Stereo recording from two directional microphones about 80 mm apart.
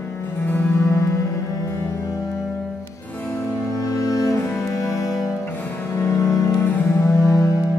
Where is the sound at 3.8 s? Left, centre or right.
Left.